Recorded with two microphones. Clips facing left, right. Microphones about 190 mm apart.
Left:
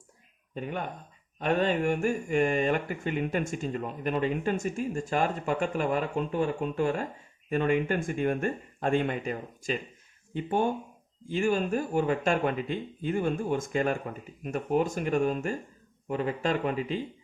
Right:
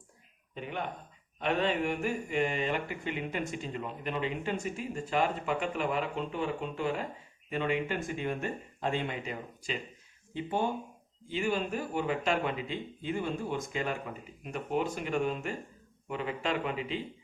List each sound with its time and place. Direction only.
0.5 s speech: 45° left (ahead or behind)